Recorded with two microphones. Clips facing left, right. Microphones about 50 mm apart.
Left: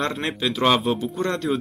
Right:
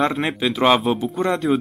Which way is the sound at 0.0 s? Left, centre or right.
Centre.